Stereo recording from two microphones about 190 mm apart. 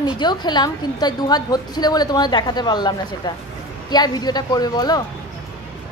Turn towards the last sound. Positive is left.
turn(degrees=20)  # may be behind; listen again after turning